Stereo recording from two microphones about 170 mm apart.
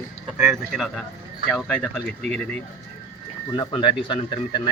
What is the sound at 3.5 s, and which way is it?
Speech, 30° left (ahead or behind).